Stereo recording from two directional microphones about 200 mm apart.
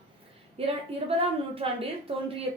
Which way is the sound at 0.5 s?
30° right (ahead or behind).